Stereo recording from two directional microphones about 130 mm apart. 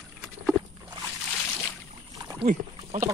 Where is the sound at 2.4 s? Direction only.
75° right (ahead or behind).